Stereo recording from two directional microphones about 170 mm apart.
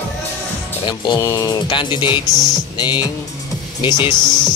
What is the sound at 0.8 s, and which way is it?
Speech, 25° left (ahead or behind).